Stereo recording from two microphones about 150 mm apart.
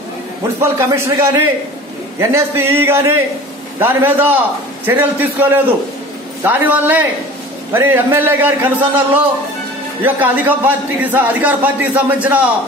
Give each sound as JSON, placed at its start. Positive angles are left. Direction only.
{"t": 0.6, "sound": "a man's voice", "side_deg": -20}
{"t": 1.1, "sound": "a man's voice", "side_deg": -30}